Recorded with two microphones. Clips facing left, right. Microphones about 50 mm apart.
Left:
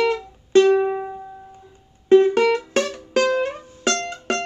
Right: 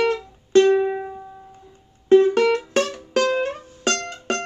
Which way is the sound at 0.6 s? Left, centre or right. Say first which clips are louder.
Left 1 dB; left.